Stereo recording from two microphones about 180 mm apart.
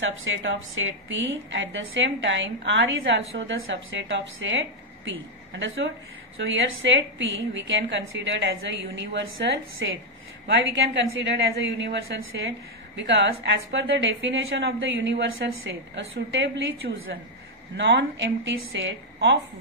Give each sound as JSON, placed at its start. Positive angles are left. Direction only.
{"t": 0.0, "sound": "a woman's voice", "side_deg": -90}
{"t": 6.3, "sound": "a woman's voice", "side_deg": -90}